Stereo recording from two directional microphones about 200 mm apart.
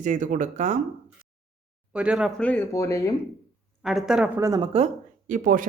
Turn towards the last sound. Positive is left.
turn(degrees=-40)  # may be behind; listen again after turning